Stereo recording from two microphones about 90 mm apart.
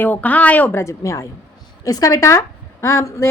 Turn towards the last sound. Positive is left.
turn(degrees=35)  # may be behind; listen again after turning